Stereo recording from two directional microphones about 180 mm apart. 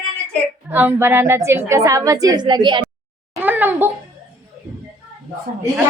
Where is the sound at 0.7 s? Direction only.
10° right (ahead or behind); by 2.8 s 25° right (ahead or behind).